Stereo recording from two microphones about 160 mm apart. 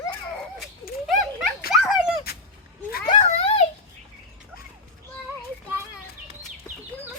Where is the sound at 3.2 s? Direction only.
40° left (ahead or behind).